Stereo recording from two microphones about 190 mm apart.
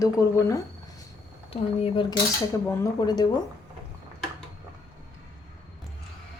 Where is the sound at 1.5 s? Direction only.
30° left (ahead or behind).